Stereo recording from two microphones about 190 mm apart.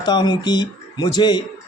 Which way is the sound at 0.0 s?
20° left (ahead or behind).